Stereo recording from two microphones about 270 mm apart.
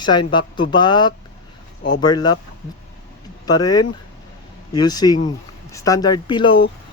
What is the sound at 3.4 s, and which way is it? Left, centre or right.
Speech, centre.